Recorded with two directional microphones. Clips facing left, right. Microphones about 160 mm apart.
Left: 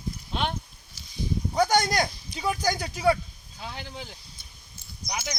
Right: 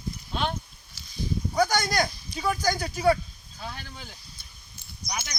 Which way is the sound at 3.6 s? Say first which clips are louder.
Left 2 dB; 20° left (ahead or behind).